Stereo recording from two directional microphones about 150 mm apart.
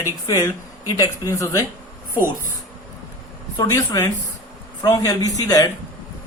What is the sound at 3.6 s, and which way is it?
A man's voice, 25° left (ahead or behind).